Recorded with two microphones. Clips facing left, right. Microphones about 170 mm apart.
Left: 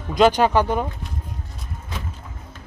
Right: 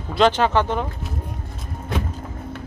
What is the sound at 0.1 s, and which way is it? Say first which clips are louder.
Speech: left 1 dB; 15° left (ahead or behind).